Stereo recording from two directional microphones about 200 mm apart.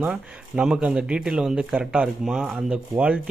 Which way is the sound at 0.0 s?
5° right (ahead or behind).